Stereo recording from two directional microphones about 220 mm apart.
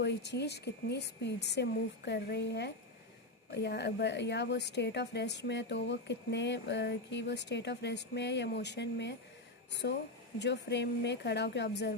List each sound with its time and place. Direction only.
0.0 s a woman's voice: 50° left (ahead or behind)